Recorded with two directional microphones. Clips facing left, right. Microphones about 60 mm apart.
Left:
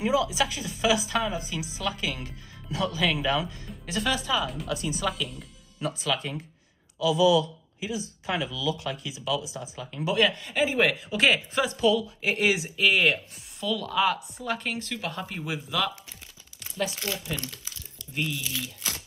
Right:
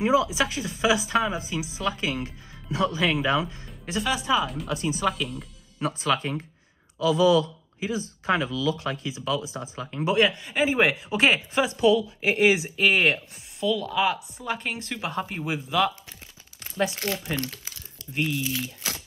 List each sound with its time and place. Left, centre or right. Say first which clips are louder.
0.0 s speech: right 3 dB; right
4.4 s speech: right 3 dB; centre
4.6 s speech: right 3 dB; right
13.6 s speech: right 2 dB; centre; by 17.6 s right
18.1 s speech: right 4 dB; right